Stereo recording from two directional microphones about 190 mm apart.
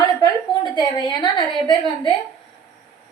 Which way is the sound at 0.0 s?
20° left (ahead or behind).